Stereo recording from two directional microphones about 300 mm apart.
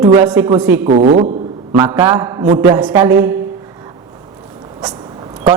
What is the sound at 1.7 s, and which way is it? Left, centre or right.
A man's voice, centre.